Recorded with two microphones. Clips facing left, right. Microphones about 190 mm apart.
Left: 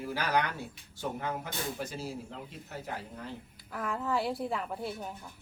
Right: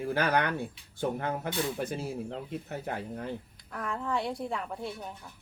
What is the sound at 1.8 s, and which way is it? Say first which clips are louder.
Speech: right 4 dB; 55° right (ahead or behind).